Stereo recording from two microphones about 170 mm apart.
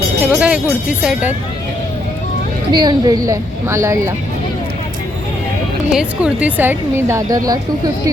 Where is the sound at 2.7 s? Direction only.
25° right (ahead or behind).